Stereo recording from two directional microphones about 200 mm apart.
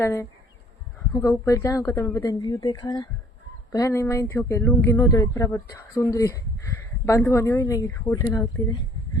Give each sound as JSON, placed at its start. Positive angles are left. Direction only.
{"t": 0.0, "sound": "speech", "side_deg": 15}